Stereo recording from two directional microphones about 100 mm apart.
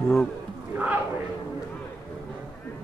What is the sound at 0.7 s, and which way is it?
Speech, 15° right (ahead or behind).